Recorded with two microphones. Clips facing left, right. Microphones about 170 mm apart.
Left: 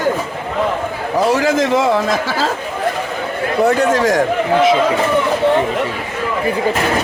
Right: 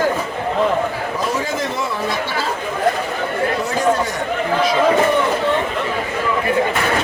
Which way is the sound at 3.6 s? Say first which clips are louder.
Left 9 dB; 65° left (ahead or behind).